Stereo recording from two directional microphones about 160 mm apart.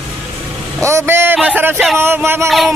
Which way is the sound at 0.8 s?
15° right (ahead or behind).